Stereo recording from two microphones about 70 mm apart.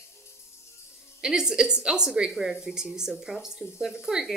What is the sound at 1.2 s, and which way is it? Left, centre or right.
A woman's voice, centre.